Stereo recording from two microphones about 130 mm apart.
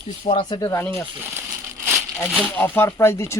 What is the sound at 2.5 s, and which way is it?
Speech, 15° left (ahead or behind).